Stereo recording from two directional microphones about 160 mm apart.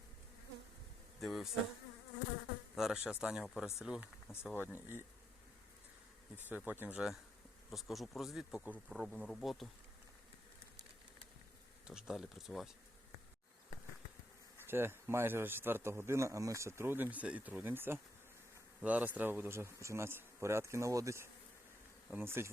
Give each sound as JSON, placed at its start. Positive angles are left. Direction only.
{"t": 1.2, "sound": "speech", "side_deg": 0}
{"t": 2.7, "sound": "a man's voice", "side_deg": -5}
{"t": 6.7, "sound": "a man's voice", "side_deg": -10}
{"t": 11.9, "sound": "speech", "side_deg": -5}
{"t": 14.7, "sound": "a man's voice", "side_deg": -15}